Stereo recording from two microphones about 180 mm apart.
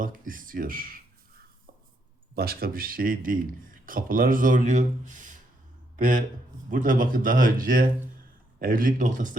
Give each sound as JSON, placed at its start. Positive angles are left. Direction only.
{"t": 0.0, "sound": "speech", "side_deg": -50}
{"t": 2.3, "sound": "speech", "side_deg": -55}